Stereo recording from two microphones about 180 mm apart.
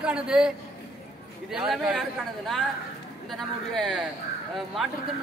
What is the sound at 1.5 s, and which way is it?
Speech, 5° right (ahead or behind).